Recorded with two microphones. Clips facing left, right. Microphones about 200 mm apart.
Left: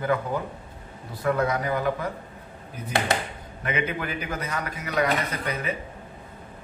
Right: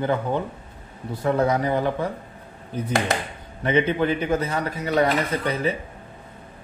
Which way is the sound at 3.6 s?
30° right (ahead or behind).